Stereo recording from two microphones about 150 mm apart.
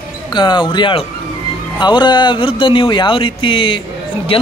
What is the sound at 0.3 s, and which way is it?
Speech, 30° left (ahead or behind).